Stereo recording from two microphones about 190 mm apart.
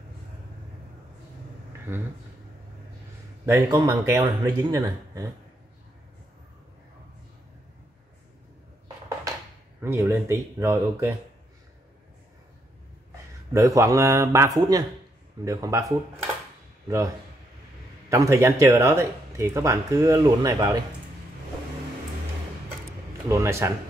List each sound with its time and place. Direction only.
3.4 s speech: 15° right (ahead or behind)
9.8 s speech: 10° right (ahead or behind)
13.5 s a man's voice: 15° right (ahead or behind)
18.1 s speech: 15° right (ahead or behind)
23.2 s speech: 15° right (ahead or behind)